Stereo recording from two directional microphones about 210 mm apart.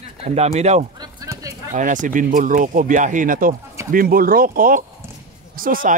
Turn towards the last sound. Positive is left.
turn(degrees=-40)  # may be behind; listen again after turning